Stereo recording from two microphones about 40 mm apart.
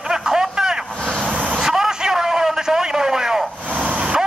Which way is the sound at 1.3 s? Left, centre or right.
Right.